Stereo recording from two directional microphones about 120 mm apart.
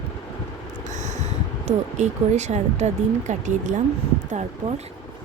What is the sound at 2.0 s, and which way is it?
Speech, 70° right (ahead or behind).